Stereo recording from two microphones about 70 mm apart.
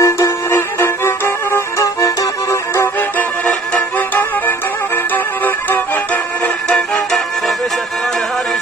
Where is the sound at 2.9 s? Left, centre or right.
Left.